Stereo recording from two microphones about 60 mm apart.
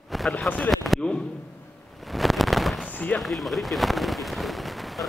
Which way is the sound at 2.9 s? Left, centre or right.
Left.